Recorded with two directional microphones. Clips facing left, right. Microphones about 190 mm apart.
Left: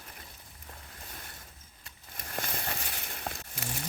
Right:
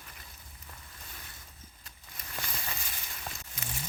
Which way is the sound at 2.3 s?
50° left (ahead or behind).